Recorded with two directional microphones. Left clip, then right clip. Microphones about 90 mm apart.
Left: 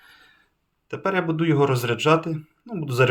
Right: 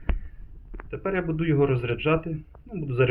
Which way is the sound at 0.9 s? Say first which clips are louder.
Left 4 dB; 35° left (ahead or behind).